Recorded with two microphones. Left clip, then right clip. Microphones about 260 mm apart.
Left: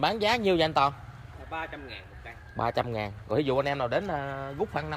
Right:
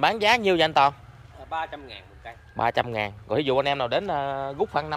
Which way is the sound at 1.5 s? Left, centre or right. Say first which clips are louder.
Right 5 dB; right.